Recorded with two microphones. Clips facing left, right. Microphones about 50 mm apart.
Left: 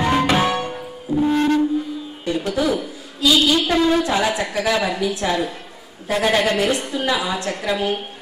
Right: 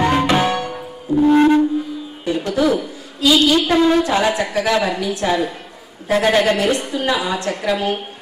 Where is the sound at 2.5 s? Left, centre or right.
Centre.